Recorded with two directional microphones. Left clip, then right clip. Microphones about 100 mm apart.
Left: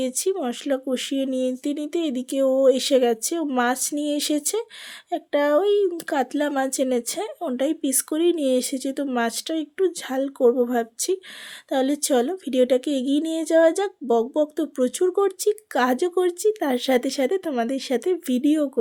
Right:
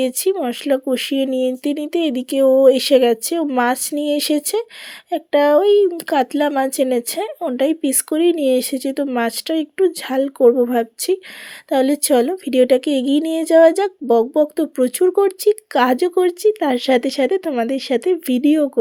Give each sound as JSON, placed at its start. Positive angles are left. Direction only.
{"t": 0.0, "sound": "speech", "side_deg": -45}